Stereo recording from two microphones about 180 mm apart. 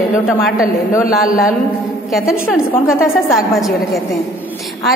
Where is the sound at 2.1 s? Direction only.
Centre (ahead or behind).